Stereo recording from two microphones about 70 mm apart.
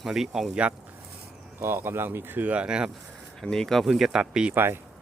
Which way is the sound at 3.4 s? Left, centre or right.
Centre.